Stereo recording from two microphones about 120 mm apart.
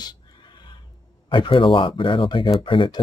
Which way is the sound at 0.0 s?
40° left (ahead or behind).